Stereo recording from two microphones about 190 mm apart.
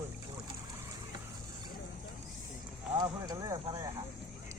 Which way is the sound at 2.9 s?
20° right (ahead or behind).